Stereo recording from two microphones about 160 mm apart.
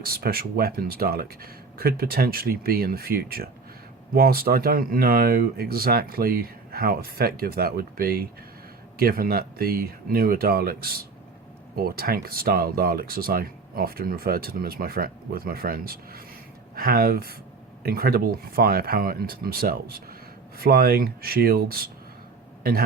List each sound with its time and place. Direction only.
0.2 s speech: 70° right (ahead or behind)